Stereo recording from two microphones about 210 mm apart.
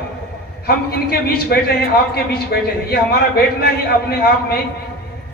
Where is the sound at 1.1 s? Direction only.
45° left (ahead or behind).